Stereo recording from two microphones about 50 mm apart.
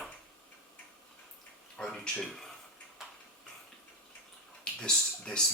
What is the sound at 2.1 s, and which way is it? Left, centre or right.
Speech, centre.